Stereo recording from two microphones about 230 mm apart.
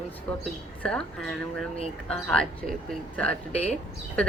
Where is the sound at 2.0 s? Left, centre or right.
Centre.